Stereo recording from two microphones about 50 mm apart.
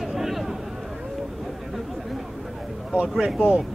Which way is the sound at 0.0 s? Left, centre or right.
Centre.